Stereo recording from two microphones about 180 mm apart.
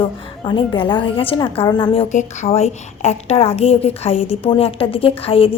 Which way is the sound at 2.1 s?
40° left (ahead or behind).